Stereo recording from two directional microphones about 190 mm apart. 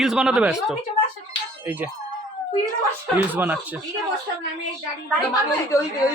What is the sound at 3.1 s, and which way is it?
Speech, 10° right (ahead or behind).